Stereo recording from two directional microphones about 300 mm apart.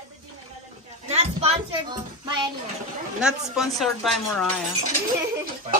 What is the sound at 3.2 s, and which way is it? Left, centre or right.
A woman's voice, centre.